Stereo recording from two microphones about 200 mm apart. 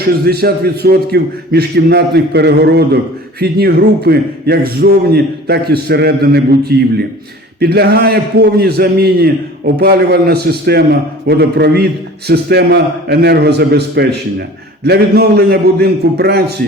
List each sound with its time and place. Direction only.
0.3 s a man's voice: 50° right (ahead or behind)